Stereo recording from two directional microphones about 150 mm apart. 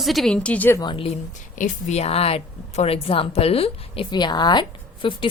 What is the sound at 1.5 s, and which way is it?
A woman's voice, 55° left (ahead or behind).